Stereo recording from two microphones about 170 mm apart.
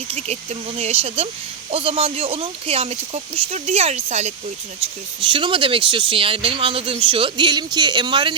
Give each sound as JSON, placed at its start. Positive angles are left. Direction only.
{"t": 0.1, "sound": "speech", "side_deg": -35}
{"t": 4.8, "sound": "speech", "side_deg": -30}